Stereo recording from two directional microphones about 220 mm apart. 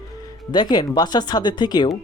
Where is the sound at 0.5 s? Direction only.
20° left (ahead or behind).